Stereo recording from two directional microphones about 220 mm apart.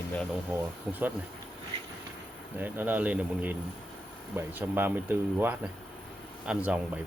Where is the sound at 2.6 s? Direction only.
10° right (ahead or behind).